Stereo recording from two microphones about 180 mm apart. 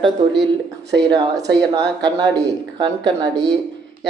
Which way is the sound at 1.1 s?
25° right (ahead or behind).